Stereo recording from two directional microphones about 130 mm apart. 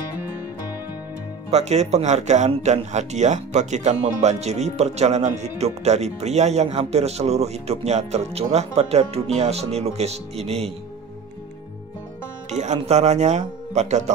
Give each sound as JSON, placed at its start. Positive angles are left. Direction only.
{"t": 1.5, "sound": "speech", "side_deg": -60}
{"t": 12.4, "sound": "speech", "side_deg": -60}